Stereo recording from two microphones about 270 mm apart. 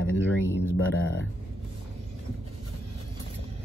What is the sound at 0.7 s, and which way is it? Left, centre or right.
Speech, left.